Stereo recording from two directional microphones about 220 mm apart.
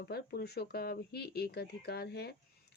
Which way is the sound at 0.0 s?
45° left (ahead or behind).